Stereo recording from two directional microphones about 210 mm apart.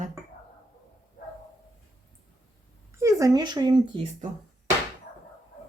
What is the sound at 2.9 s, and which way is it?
Speech, 15° right (ahead or behind).